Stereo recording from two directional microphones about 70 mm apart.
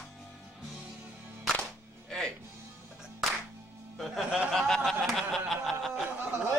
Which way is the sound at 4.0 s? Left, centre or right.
Centre.